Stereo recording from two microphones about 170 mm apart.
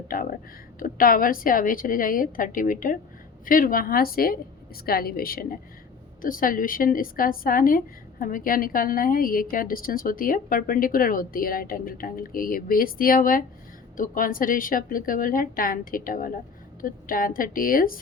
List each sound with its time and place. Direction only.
0.1 s a woman's voice: 55° left (ahead or behind)